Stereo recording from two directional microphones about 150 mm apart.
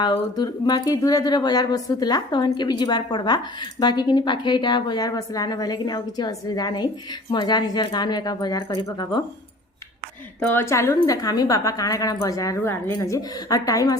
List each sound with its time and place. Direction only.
0.0 s speech: 30° left (ahead or behind)
10.4 s speech: 15° left (ahead or behind)